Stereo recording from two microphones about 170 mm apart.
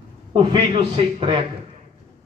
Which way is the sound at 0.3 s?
30° right (ahead or behind).